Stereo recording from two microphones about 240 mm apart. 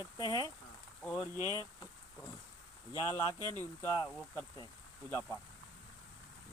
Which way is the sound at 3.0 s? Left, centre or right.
Centre.